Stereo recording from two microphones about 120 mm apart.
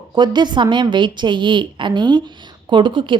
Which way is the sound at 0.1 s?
40° right (ahead or behind).